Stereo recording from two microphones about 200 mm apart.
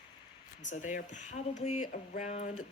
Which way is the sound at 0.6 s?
35° left (ahead or behind).